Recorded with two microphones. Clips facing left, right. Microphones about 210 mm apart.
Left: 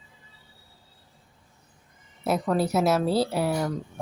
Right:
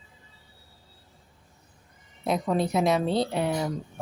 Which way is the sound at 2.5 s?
5° left (ahead or behind).